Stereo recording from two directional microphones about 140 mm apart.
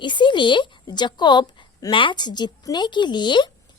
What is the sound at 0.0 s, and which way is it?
A woman's voice, 35° left (ahead or behind).